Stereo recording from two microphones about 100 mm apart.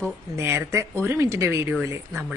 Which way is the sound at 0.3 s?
30° right (ahead or behind).